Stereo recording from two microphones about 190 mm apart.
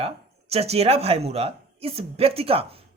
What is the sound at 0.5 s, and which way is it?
Speech, 35° right (ahead or behind).